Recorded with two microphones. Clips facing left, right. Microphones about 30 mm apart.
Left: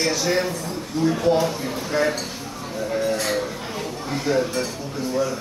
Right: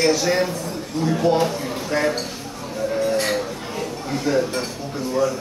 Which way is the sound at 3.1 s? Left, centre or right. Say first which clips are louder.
Right 3 dB; right.